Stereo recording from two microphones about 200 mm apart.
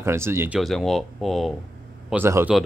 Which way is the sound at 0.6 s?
Centre (ahead or behind).